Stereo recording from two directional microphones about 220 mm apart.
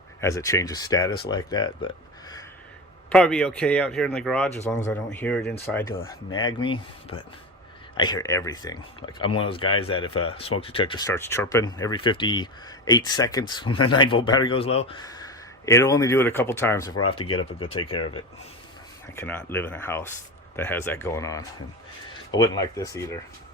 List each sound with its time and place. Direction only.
0.2 s speech: 15° left (ahead or behind)
3.1 s speech: 5° left (ahead or behind)
6.0 s speech: 70° left (ahead or behind)
6.5 s speech: 20° left (ahead or behind)
19.1 s speech: 10° left (ahead or behind)